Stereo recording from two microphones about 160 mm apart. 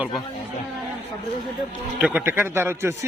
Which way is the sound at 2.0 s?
10° right (ahead or behind).